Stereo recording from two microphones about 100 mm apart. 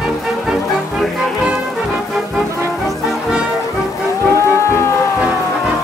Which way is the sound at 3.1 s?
5° right (ahead or behind).